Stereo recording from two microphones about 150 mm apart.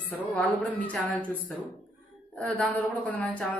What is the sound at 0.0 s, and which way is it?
Speech, 10° left (ahead or behind).